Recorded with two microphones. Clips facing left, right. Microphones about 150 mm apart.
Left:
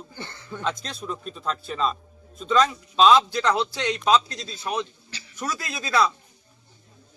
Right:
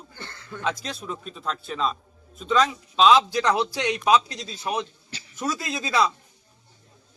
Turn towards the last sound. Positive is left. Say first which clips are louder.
# even
turn(degrees=-15)  # may be behind; listen again after turning